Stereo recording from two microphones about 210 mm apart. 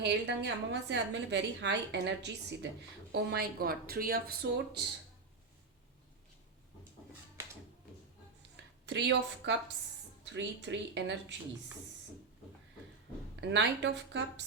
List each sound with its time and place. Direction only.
0.0 s a woman's voice: 55° right (ahead or behind)
8.9 s a woman's voice: 55° right (ahead or behind)
13.5 s a woman's voice: 55° right (ahead or behind)